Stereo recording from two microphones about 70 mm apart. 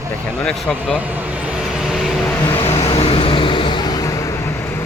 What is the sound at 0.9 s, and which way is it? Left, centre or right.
Vehicle, right.